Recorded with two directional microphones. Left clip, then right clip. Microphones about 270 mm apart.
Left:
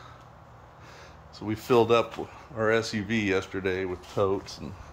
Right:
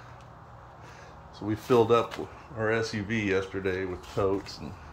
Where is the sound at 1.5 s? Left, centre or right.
Centre.